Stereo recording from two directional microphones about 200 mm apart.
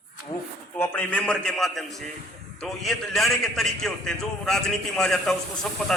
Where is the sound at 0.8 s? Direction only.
10° left (ahead or behind).